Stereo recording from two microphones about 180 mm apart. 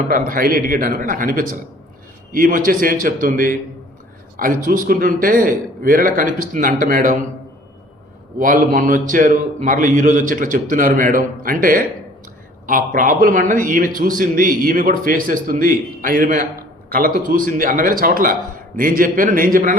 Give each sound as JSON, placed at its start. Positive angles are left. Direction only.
{"t": 0.1, "sound": "a man's voice", "side_deg": -50}
{"t": 8.4, "sound": "a man's voice", "side_deg": -50}